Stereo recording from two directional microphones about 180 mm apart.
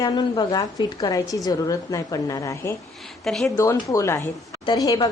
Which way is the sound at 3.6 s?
15° left (ahead or behind).